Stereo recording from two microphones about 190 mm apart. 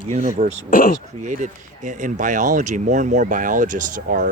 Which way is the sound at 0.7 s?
45° left (ahead or behind).